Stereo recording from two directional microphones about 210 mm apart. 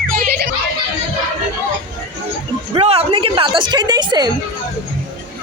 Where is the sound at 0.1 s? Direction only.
40° right (ahead or behind).